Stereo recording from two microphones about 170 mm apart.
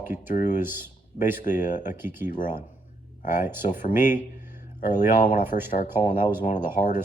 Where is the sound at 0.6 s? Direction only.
10° right (ahead or behind).